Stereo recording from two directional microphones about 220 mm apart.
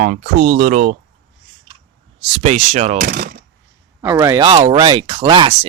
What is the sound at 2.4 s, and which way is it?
Speech, 30° right (ahead or behind).